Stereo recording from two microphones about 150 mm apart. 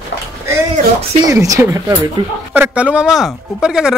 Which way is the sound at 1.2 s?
20° right (ahead or behind).